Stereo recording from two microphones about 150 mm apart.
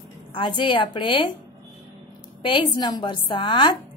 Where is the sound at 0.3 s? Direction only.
30° left (ahead or behind).